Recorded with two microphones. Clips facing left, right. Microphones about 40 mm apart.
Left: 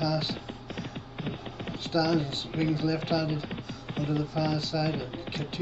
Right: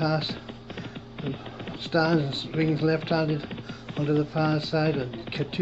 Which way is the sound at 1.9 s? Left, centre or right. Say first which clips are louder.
Right 3 dB; centre.